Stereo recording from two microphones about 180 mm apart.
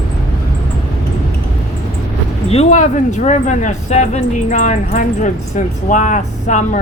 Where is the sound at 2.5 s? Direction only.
35° left (ahead or behind).